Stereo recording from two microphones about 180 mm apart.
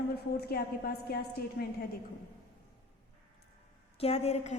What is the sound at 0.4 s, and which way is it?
A woman's voice, 55° left (ahead or behind).